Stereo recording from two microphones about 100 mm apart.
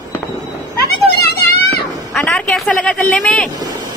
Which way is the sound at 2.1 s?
10° left (ahead or behind).